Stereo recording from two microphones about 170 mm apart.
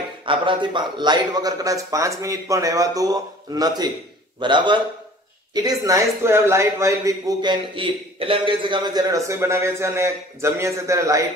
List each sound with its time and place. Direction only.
0.2 s a man's voice: 30° right (ahead or behind)